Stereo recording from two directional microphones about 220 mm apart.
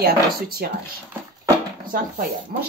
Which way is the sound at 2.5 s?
40° right (ahead or behind).